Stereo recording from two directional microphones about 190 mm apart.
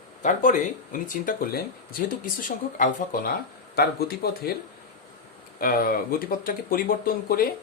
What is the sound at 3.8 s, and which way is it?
Speech, 55° left (ahead or behind).